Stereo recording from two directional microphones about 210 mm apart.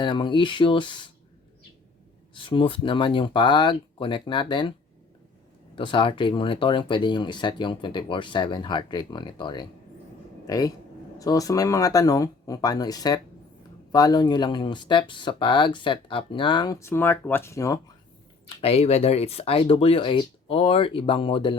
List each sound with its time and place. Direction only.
0.0 s speech: 20° left (ahead or behind)
2.3 s speech: 25° left (ahead or behind)
5.7 s speech: 25° left (ahead or behind)
18.4 s speech: 30° left (ahead or behind)